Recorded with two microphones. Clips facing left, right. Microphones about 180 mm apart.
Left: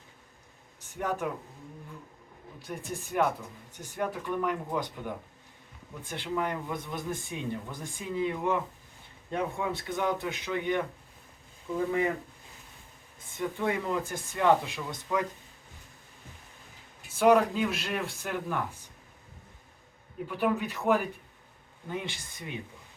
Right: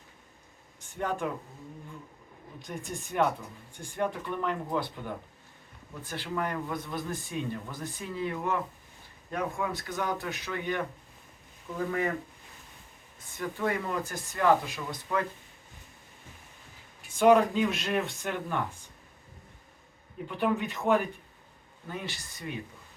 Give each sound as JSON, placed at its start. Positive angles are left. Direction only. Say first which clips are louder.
{"t": 1.2, "sound": "speech", "louder": "even", "side_deg": 5}
{"t": 2.6, "sound": "speech", "louder": "left 1 dB", "side_deg": 5}
{"t": 6.1, "sound": "speech", "louder": "left 1 dB", "side_deg": 20}
{"t": 11.9, "sound": "speech", "louder": "left 2 dB", "side_deg": 15}
{"t": 13.3, "sound": "speech", "louder": "left 1 dB", "side_deg": 20}
{"t": 17.2, "sound": "speech", "louder": "right 1 dB", "side_deg": 0}
{"t": 20.2, "sound": "speech", "louder": "even", "side_deg": 5}
{"t": 21.8, "sound": "speech", "louder": "left 2 dB", "side_deg": 20}